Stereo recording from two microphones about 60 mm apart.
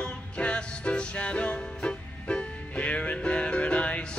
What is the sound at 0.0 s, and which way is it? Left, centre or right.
Music, centre.